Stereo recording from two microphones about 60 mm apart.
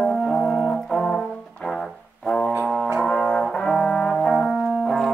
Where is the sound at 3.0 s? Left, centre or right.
Centre.